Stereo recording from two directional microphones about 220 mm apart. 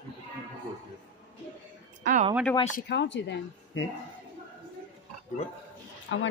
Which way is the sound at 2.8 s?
50° left (ahead or behind).